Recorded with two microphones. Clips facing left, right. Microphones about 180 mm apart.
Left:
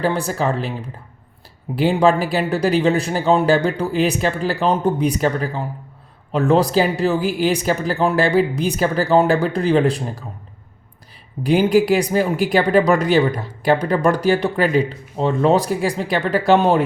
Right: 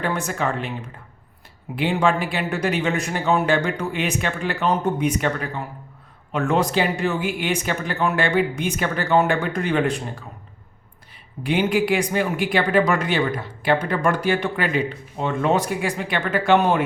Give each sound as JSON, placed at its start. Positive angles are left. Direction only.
{"t": 0.0, "sound": "speech", "side_deg": 35}
{"t": 11.4, "sound": "speech", "side_deg": 40}